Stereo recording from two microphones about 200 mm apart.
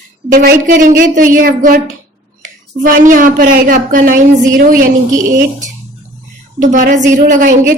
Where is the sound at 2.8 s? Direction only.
40° right (ahead or behind).